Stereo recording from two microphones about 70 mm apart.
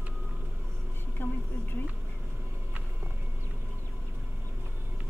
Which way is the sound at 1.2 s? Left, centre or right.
Left.